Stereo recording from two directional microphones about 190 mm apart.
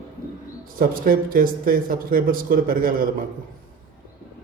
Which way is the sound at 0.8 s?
50° right (ahead or behind).